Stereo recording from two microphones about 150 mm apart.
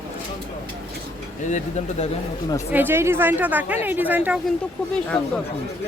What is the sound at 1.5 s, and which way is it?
Speech, 50° left (ahead or behind).